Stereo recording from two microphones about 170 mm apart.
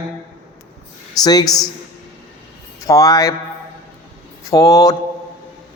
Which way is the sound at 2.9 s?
20° left (ahead or behind).